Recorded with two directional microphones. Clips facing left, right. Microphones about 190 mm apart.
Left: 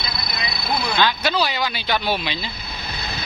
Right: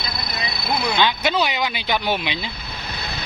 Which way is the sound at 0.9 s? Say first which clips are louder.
Even; 20° right (ahead or behind).